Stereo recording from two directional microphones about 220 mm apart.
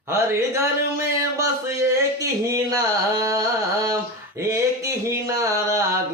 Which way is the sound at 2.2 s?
15° right (ahead or behind).